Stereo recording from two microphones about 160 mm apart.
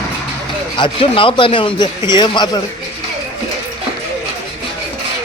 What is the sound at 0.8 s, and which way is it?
A man's voice, 35° left (ahead or behind).